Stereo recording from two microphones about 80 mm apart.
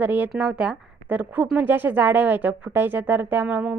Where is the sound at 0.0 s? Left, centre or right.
Right.